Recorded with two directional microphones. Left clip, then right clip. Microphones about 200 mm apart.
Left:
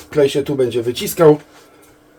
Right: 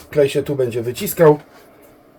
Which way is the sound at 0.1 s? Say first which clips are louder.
Left 1 dB; 25° left (ahead or behind).